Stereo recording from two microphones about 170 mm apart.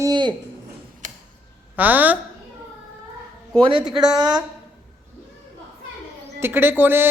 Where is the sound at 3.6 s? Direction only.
30° right (ahead or behind).